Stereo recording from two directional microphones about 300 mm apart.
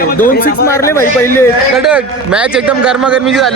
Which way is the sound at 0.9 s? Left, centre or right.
Centre.